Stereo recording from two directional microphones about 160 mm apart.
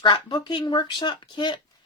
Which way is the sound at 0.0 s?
30° left (ahead or behind).